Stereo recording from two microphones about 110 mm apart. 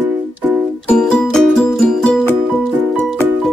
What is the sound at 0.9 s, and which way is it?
Music, 5° left (ahead or behind).